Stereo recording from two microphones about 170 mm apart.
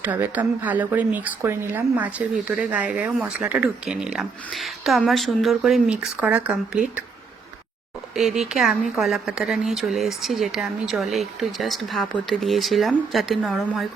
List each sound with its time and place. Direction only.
0.0 s speech: 10° right (ahead or behind)
8.1 s speech: centre (ahead or behind)